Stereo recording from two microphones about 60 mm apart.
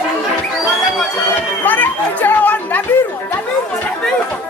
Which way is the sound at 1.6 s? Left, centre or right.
Left.